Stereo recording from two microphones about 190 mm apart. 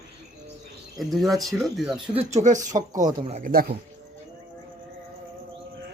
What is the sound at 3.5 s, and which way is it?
Speech, 50° right (ahead or behind).